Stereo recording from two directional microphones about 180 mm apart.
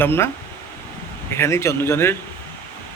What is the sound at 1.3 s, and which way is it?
Speech, 15° left (ahead or behind).